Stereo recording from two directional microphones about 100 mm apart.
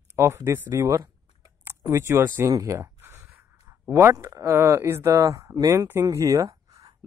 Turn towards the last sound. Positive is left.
turn(degrees=-35)  # may be behind; listen again after turning